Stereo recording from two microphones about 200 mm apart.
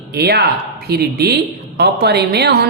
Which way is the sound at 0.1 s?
55° right (ahead or behind).